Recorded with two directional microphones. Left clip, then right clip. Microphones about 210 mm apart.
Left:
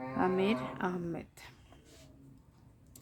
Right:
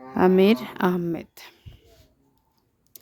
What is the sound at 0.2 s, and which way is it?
Speech, 55° right (ahead or behind).